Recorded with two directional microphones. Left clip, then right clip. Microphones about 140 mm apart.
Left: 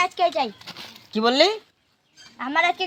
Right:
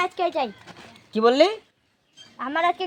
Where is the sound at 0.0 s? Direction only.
30° right (ahead or behind).